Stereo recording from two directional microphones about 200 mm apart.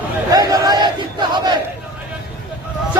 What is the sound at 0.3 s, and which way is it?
Battle cry, 20° right (ahead or behind).